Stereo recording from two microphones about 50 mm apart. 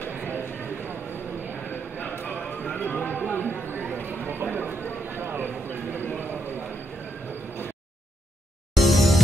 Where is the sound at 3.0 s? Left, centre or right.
Left.